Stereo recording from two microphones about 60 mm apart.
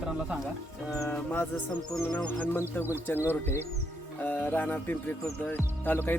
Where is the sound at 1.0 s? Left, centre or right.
Left.